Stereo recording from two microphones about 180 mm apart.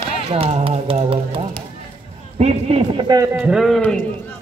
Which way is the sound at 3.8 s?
5° left (ahead or behind).